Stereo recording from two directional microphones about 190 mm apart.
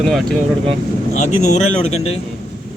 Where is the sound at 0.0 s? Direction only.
Centre (ahead or behind).